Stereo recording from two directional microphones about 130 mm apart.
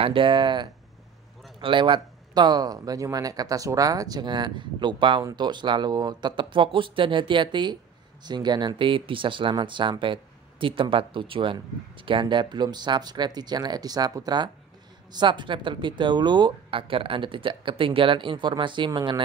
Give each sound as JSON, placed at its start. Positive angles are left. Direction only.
{"t": 0.0, "sound": "speech", "side_deg": -40}